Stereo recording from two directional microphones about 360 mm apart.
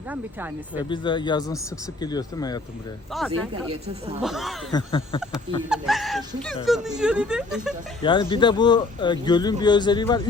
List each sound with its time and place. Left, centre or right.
0.1 s speech: centre
0.9 s speech: centre
3.1 s speech: centre
3.7 s a woman's voice: centre
4.2 s speech: centre
4.7 s speech: centre
5.6 s speech: centre
8.0 s speech: centre